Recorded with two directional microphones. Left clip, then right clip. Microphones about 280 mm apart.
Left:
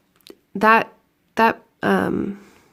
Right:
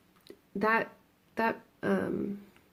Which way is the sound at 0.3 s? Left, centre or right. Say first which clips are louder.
Left 13 dB; left.